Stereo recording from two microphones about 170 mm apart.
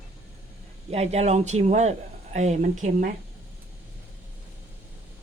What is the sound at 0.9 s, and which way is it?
Speech, 40° right (ahead or behind).